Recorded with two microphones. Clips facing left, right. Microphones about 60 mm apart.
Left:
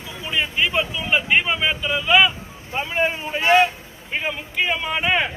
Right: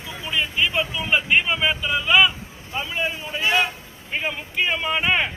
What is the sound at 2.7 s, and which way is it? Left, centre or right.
Speech, left.